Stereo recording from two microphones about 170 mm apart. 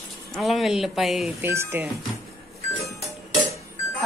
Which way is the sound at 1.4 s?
15° right (ahead or behind).